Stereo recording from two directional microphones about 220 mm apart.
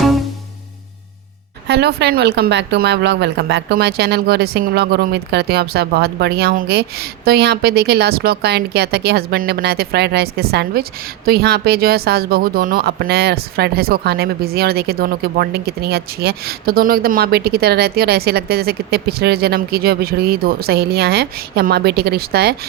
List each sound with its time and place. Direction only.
1.6 s speech: 50° right (ahead or behind)